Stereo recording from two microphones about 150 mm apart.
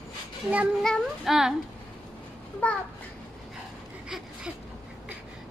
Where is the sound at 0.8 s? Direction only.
Centre (ahead or behind).